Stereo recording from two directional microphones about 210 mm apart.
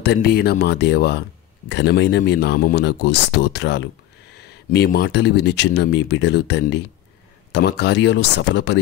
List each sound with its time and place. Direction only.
0.0 s speech: 50° left (ahead or behind)